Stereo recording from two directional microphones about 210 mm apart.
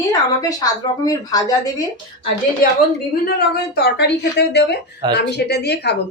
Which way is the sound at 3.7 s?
50° left (ahead or behind).